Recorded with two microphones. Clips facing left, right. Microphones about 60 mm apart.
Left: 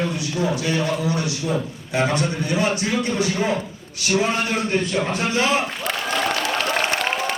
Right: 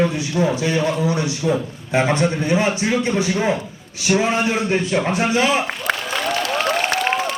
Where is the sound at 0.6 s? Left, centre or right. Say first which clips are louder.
Right 3 dB; right.